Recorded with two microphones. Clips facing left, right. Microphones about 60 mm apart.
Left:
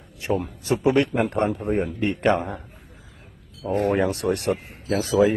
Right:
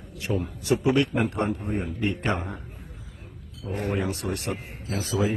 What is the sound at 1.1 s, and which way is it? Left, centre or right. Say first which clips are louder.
Speech: left 3 dB; left.